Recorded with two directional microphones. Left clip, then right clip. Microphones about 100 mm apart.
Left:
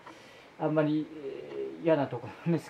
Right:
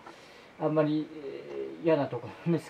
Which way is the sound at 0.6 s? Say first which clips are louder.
Right 1 dB; 30° left (ahead or behind).